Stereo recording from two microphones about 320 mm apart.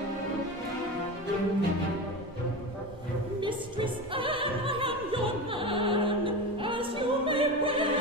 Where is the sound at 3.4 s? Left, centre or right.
Centre.